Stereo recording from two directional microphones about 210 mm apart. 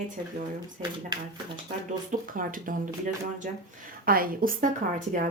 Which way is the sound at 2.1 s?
40° right (ahead or behind).